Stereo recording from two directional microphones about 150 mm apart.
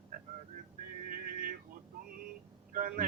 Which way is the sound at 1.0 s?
70° right (ahead or behind).